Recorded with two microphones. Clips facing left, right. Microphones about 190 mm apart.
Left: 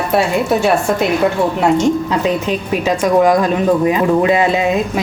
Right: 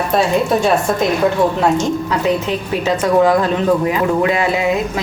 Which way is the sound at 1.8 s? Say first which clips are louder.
Left 3 dB; 15° left (ahead or behind).